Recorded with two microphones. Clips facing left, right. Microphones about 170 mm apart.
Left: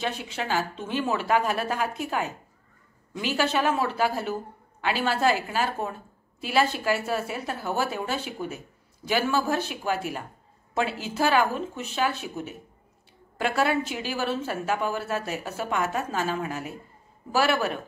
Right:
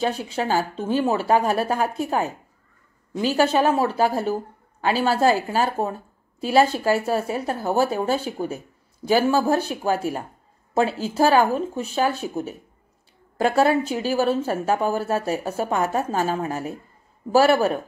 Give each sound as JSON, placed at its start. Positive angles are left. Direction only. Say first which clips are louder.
{"t": 0.0, "sound": "a woman's voice", "louder": "right 7 dB", "side_deg": -35}